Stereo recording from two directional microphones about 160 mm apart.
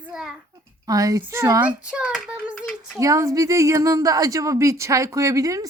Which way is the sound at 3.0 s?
20° right (ahead or behind).